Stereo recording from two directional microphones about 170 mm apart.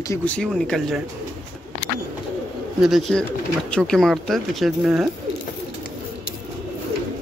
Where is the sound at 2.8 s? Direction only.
Centre (ahead or behind).